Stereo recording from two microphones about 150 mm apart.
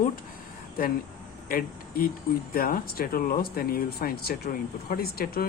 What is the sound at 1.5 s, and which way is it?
Speech, 75° left (ahead or behind).